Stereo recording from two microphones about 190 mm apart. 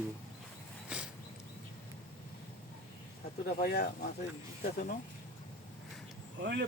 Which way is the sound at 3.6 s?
55° left (ahead or behind).